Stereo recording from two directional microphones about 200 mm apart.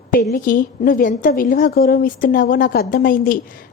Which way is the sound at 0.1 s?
45° left (ahead or behind).